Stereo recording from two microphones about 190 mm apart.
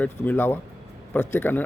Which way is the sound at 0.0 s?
10° left (ahead or behind).